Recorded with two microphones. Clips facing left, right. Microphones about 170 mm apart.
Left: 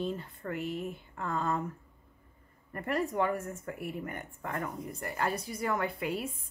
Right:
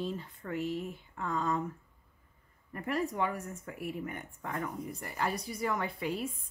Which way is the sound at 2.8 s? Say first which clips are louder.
Left 1 dB; 55° left (ahead or behind).